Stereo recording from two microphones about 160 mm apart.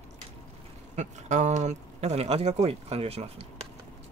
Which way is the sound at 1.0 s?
50° right (ahead or behind).